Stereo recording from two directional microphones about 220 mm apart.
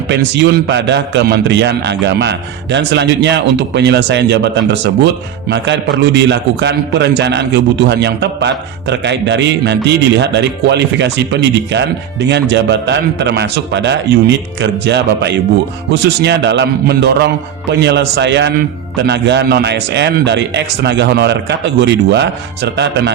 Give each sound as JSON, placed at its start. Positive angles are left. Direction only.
{"t": 0.1, "sound": "a man's voice", "side_deg": -50}